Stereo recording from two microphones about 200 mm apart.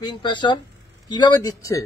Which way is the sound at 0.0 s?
20° left (ahead or behind).